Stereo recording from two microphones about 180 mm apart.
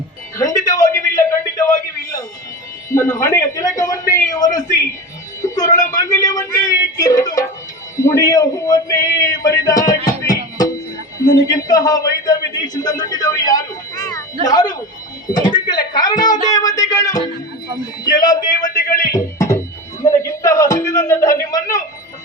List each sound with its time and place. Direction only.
0.3 s a sound: 20° left (ahead or behind)
2.9 s speech: 15° left (ahead or behind)
5.6 s a man's voice: 45° left (ahead or behind)
6.1 s speech: 20° left (ahead or behind)
11.3 s a man's voice: 20° left (ahead or behind)
19.1 s music: 15° left (ahead or behind)
20.0 s speech: 15° left (ahead or behind)